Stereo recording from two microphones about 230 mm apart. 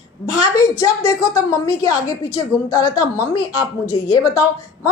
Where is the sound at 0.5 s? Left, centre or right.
Centre.